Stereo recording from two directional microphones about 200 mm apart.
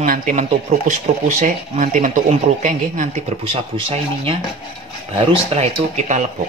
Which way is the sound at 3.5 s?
25° right (ahead or behind).